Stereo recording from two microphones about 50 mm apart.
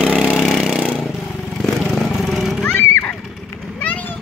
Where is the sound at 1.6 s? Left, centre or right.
Centre.